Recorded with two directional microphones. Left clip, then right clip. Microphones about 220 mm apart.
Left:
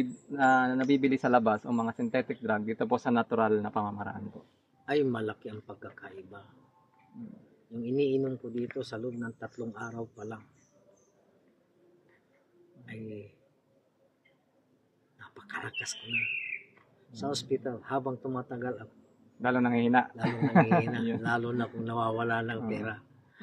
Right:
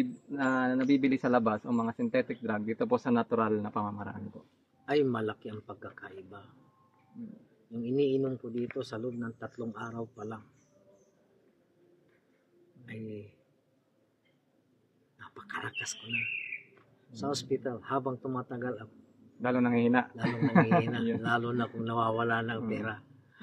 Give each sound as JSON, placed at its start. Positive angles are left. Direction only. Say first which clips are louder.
{"t": 0.0, "sound": "a man's voice", "louder": "left 5 dB", "side_deg": 40}
{"t": 4.8, "sound": "a man's voice", "louder": "even", "side_deg": 0}
{"t": 7.7, "sound": "a man's voice", "louder": "even", "side_deg": 5}
{"t": 12.8, "sound": "a man's voice", "louder": "even", "side_deg": 0}
{"t": 15.1, "sound": "speech", "louder": "even", "side_deg": 5}
{"t": 17.1, "sound": "a man's voice", "louder": "left 1 dB", "side_deg": 5}
{"t": 19.4, "sound": "a man's voice", "louder": "left 1 dB", "side_deg": 35}
{"t": 21.2, "sound": "a man's voice", "louder": "even", "side_deg": 0}